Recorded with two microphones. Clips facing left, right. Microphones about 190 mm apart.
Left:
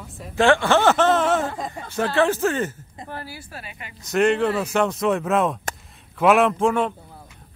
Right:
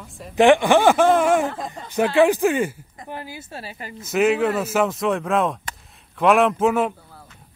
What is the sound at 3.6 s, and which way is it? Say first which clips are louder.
Speech: right 5 dB; 35° right (ahead or behind).